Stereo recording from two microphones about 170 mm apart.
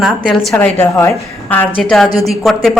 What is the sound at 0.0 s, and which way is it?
A woman's voice, 5° left (ahead or behind).